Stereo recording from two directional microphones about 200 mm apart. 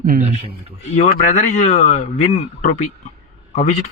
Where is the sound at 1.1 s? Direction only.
40° left (ahead or behind).